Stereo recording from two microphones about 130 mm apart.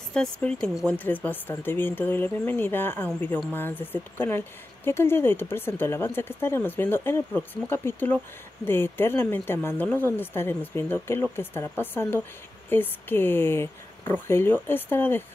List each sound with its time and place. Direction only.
0.1 s speech: 5° left (ahead or behind)